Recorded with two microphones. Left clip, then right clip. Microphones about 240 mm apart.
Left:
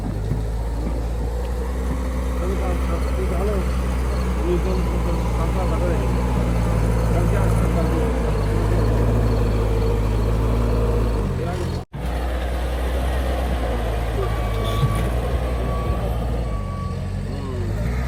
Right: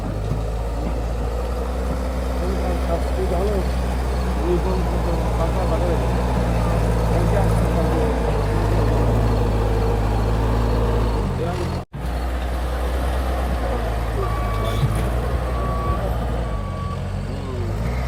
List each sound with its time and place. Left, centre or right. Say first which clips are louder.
3.2 s vehicle: right 2 dB; right
4.4 s a sound: right 2 dB; centre
6.0 s vehicle: right 2 dB; centre
7.3 s vehicle: right 2 dB; right
8.4 s vehicle: right 1 dB; centre
10.5 s vehicle: even; centre
14.2 s vehicle: right 3 dB; centre